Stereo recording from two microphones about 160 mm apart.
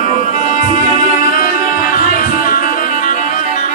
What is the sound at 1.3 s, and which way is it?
Music, 65° left (ahead or behind).